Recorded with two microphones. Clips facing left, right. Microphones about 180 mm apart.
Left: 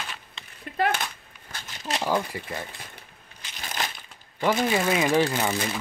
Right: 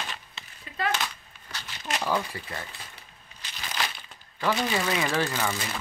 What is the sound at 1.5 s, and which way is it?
Walk, 50° left (ahead or behind).